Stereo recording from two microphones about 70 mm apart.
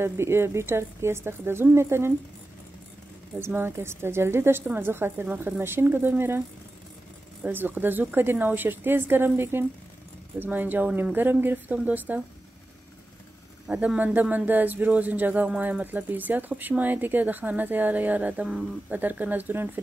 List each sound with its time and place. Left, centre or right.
0.0 s a woman's voice: right
3.3 s a woman's voice: right
7.4 s speech: right
13.7 s speech: centre